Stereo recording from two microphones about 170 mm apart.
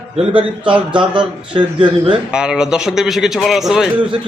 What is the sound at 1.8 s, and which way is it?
Speech, 30° right (ahead or behind).